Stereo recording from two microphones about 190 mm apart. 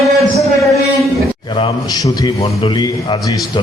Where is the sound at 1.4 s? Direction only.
25° left (ahead or behind).